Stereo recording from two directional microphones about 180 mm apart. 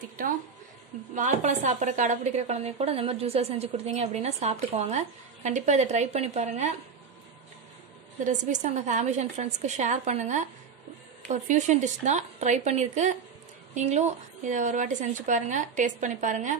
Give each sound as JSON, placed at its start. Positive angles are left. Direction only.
{"t": 1.1, "sound": "a woman's voice", "side_deg": -45}
{"t": 8.2, "sound": "a woman's voice", "side_deg": -45}